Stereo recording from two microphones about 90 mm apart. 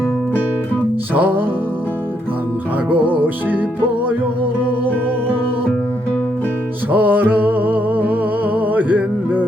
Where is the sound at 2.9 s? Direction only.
20° right (ahead or behind).